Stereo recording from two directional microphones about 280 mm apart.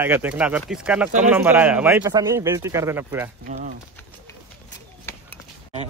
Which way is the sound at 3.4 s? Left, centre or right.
Right.